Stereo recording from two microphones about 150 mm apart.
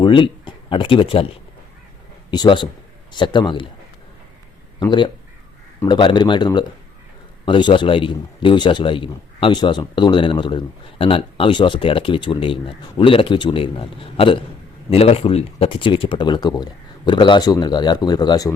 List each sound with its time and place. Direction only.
0.0 s a man's voice: 35° left (ahead or behind)
4.8 s a man's voice: 30° left (ahead or behind)